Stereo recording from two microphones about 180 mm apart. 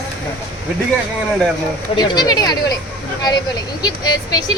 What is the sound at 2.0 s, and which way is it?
Speech, 20° left (ahead or behind).